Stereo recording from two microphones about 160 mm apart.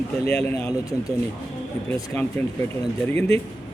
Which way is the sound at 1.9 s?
15° left (ahead or behind).